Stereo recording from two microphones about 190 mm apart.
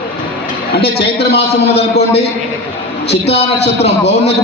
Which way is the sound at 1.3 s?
60° left (ahead or behind).